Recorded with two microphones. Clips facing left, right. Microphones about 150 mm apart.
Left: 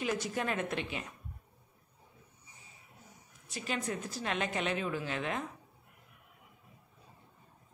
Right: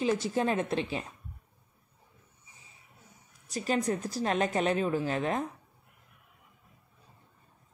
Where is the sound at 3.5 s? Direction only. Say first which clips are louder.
Right 7 dB; 40° right (ahead or behind).